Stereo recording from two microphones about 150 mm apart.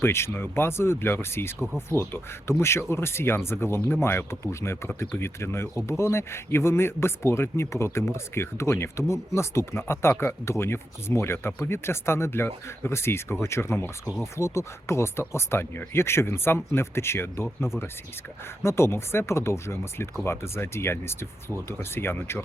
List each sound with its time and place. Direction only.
0.0 s a man's voice: 15° left (ahead or behind)
14.0 s speech: centre (ahead or behind)
14.3 s a man's voice: 20° left (ahead or behind)